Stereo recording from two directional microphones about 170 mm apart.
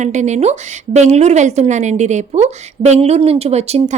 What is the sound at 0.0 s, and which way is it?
A woman's voice, 45° right (ahead or behind).